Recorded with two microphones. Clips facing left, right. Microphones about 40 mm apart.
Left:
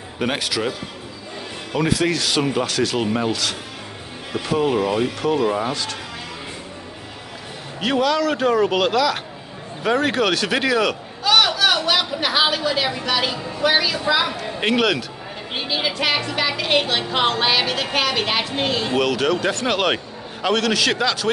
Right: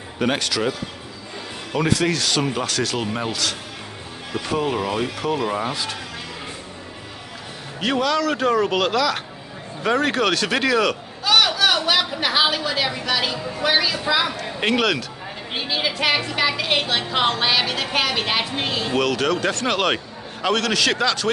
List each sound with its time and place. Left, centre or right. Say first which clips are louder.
0.2 s a woman's voice: right 1 dB; centre
7.8 s a woman's voice: left 1 dB; centre